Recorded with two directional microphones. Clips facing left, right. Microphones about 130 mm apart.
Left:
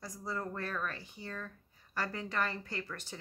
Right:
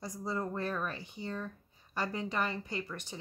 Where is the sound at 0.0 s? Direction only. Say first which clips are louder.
Right 3 dB; 20° right (ahead or behind).